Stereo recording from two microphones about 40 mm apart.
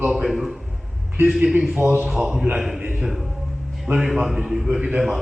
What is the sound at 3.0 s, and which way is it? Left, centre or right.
A man's voice, centre.